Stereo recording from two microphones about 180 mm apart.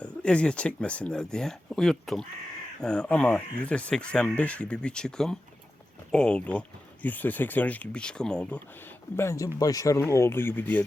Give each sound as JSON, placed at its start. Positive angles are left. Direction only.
{"t": 0.0, "sound": "speech", "side_deg": 5}
{"t": 9.1, "sound": "speech", "side_deg": 15}